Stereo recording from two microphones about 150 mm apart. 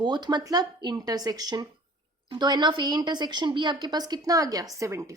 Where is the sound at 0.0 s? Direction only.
30° right (ahead or behind).